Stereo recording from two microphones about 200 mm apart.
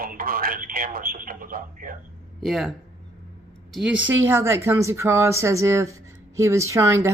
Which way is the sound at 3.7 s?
5° right (ahead or behind).